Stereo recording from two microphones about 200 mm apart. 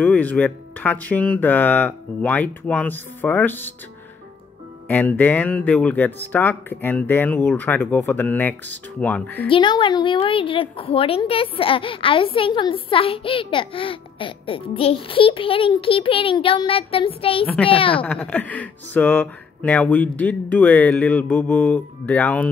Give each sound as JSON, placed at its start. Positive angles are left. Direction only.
{"t": 0.0, "sound": "speech", "side_deg": 10}
{"t": 4.8, "sound": "speech", "side_deg": 10}
{"t": 9.5, "sound": "a woman's voice", "side_deg": 25}
{"t": 18.0, "sound": "speech", "side_deg": 5}